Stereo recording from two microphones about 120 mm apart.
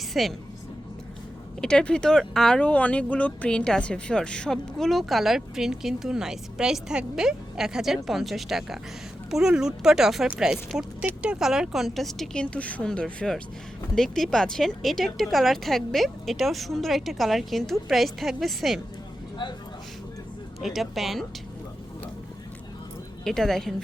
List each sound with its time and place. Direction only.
0.1 s a woman's voice: centre (ahead or behind)
1.6 s speech: 10° left (ahead or behind)
19.4 s speech: 40° left (ahead or behind)
20.6 s speech: centre (ahead or behind)
23.2 s speech: 5° left (ahead or behind)